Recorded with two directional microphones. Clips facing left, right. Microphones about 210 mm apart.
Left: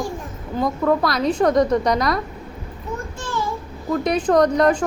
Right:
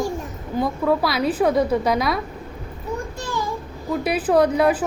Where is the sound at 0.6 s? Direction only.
5° right (ahead or behind).